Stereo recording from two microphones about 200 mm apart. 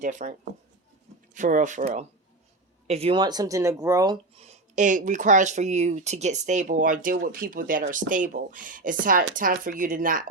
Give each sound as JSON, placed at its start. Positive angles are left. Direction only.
{"t": 0.0, "sound": "speech", "side_deg": -40}
{"t": 4.4, "sound": "speech", "side_deg": -40}